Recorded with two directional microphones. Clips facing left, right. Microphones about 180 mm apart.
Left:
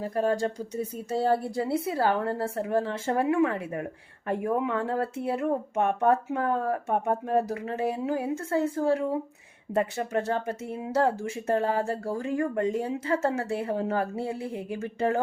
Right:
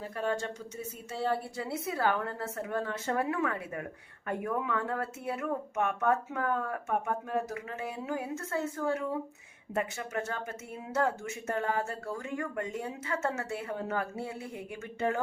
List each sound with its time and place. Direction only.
0.0 s speech: 40° left (ahead or behind)